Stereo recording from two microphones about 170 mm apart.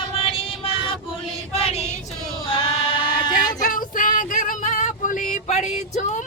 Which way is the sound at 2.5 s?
35° left (ahead or behind).